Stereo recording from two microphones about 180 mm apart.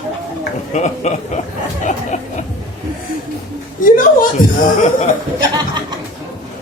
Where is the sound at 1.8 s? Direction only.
40° left (ahead or behind).